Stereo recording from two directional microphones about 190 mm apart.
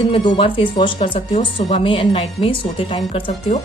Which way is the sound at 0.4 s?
25° left (ahead or behind).